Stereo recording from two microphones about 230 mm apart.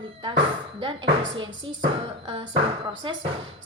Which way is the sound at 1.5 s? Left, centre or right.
Right.